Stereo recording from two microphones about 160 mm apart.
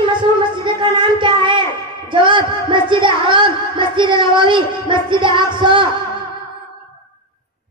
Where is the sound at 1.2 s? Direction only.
30° right (ahead or behind).